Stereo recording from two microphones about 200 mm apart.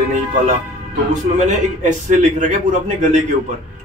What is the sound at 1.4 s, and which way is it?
A man's voice, 40° right (ahead or behind).